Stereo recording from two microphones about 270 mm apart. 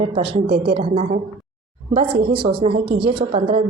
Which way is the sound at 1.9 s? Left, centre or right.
Right.